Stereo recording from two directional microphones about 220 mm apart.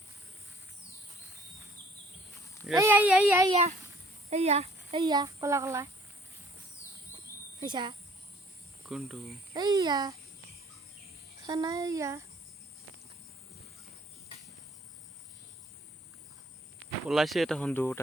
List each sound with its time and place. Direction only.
2.7 s speech: 10° right (ahead or behind)
3.5 s speech: 30° right (ahead or behind); by 5.9 s 15° right (ahead or behind)
7.6 s speech: 20° right (ahead or behind)
8.9 s speech: centre (ahead or behind)
9.5 s speech: 20° right (ahead or behind)
11.4 s speech: 15° right (ahead or behind)
17.1 s speech: centre (ahead or behind)